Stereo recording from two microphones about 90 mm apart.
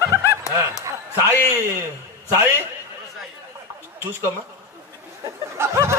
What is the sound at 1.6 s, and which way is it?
Speech, 30° right (ahead or behind).